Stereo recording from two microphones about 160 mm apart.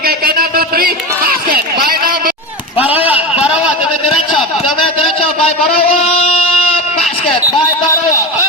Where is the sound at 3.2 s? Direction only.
5° right (ahead or behind).